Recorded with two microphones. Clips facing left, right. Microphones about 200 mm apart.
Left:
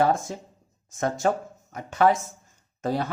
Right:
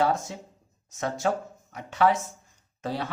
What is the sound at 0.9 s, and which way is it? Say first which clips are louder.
Speech: left 3 dB; 50° left (ahead or behind).